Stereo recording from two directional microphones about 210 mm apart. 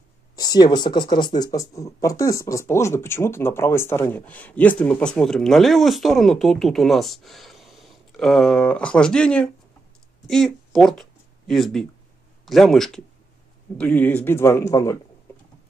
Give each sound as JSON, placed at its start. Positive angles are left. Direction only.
{"t": 0.4, "sound": "speech", "side_deg": 20}